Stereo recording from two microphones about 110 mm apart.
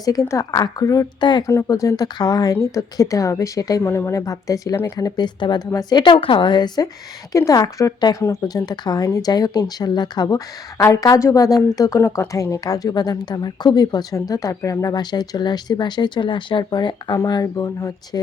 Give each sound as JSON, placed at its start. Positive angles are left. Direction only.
{"t": 0.0, "sound": "speech", "side_deg": 30}
{"t": 1.5, "sound": "a woman's voice", "side_deg": 30}
{"t": 11.9, "sound": "speech", "side_deg": 20}